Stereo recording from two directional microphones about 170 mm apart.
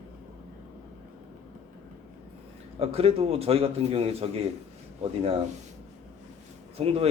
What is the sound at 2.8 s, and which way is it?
A man's voice, 35° right (ahead or behind).